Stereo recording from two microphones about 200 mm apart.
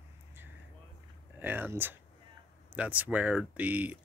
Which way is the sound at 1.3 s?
10° right (ahead or behind).